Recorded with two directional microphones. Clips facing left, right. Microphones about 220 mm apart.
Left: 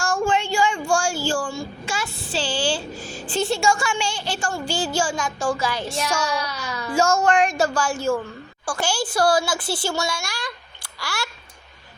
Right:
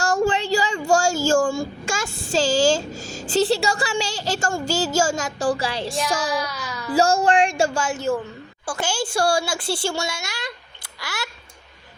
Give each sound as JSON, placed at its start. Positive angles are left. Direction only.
{"t": 0.0, "sound": "speech", "side_deg": -40}
{"t": 6.1, "sound": "child singing", "side_deg": -35}
{"t": 6.3, "sound": "a child's voice", "side_deg": -5}
{"t": 6.9, "sound": "a child's voice", "side_deg": -35}